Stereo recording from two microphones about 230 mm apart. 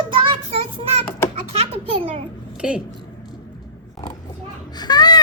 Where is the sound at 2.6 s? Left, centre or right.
Centre.